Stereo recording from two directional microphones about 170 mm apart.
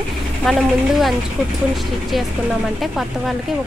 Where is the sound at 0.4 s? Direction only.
Centre (ahead or behind).